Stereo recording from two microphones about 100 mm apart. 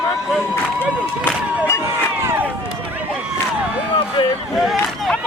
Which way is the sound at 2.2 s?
20° right (ahead or behind).